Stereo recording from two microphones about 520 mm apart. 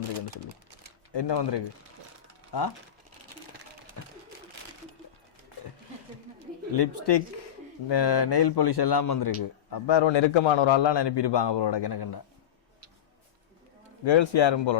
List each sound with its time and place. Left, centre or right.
1.1 s a man's voice: left
4.0 s a sound: left
6.7 s a man's voice: left
14.0 s a man's voice: left